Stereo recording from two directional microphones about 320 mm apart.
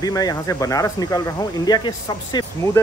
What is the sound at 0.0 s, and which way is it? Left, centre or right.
Speech, centre.